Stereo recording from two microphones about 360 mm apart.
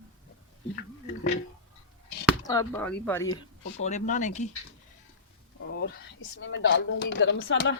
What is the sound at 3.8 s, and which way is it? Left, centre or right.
Speech, centre.